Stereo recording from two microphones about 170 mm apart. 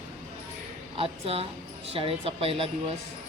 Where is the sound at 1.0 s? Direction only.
35° right (ahead or behind).